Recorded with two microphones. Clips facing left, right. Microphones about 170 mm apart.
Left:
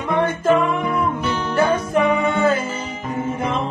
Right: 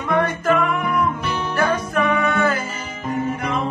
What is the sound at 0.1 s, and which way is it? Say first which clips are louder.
Music: left 2 dB; 25° left (ahead or behind).